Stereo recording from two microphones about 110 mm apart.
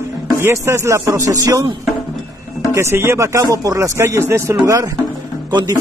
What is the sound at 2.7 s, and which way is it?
A man's voice, 25° right (ahead or behind).